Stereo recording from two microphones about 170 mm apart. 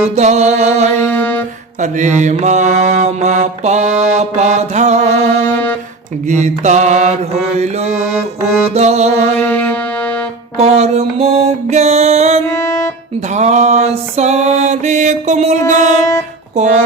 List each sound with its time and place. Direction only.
0.2 s mantra: 40° right (ahead or behind)
1.0 s music: 10° left (ahead or behind)
1.8 s mantra: 45° right (ahead or behind)
9.4 s music: 5° left (ahead or behind)
10.6 s mantra: 40° right (ahead or behind)
12.5 s music: 20° left (ahead or behind)
13.2 s mantra: 45° right (ahead or behind)